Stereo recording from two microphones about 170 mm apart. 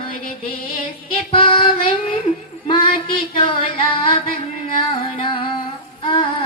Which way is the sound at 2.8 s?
60° left (ahead or behind).